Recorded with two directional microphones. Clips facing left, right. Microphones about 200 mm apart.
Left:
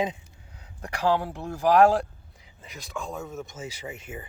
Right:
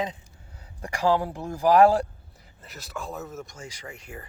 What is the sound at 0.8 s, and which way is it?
Speech, 10° right (ahead or behind).